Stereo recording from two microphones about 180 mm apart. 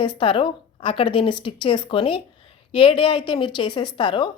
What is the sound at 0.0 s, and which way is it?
A woman's voice, 25° left (ahead or behind).